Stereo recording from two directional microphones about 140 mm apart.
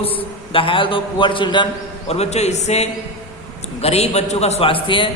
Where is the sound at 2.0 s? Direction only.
50° left (ahead or behind).